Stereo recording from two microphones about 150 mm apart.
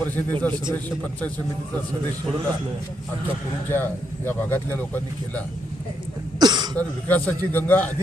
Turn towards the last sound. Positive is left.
turn(degrees=10)  # may be behind; listen again after turning